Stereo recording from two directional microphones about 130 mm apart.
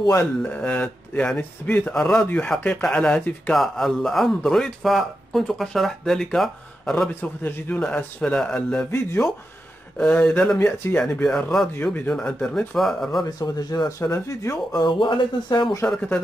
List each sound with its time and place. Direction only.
0.0 s speech: 25° left (ahead or behind)
0.4 s a man's voice: 10° left (ahead or behind)
7.2 s a man's voice: 15° left (ahead or behind)
11.2 s a man's voice: 5° left (ahead or behind)
13.2 s speech: 30° left (ahead or behind)
14.8 s speech: 40° left (ahead or behind)